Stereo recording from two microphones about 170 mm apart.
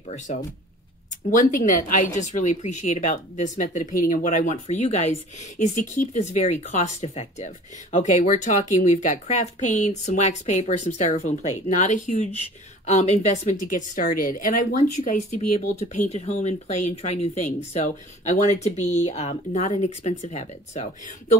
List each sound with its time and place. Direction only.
1.3 s a woman's voice: 50° left (ahead or behind)